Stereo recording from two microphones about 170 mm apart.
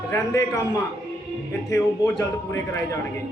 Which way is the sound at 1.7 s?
20° left (ahead or behind).